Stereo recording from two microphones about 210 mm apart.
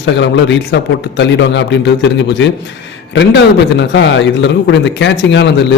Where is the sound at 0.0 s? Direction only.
55° left (ahead or behind).